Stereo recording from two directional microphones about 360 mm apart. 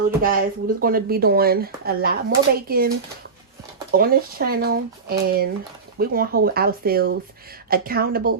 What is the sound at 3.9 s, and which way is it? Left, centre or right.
A woman's voice, right.